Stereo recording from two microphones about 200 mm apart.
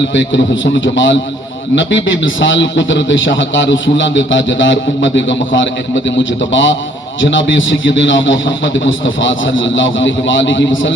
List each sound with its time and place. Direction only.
0.1 s a man's voice: 65° left (ahead or behind)